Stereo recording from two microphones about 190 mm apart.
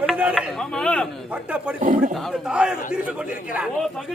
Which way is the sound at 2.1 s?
Centre (ahead or behind).